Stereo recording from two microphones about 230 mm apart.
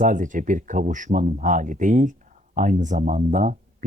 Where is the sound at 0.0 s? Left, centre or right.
Right.